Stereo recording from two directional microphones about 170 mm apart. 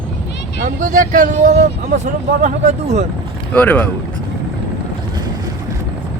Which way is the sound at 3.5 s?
10° left (ahead or behind).